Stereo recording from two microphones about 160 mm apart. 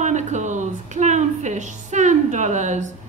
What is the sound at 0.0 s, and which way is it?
Music, 50° right (ahead or behind).